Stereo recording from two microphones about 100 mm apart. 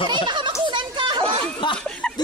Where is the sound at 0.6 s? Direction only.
50° right (ahead or behind).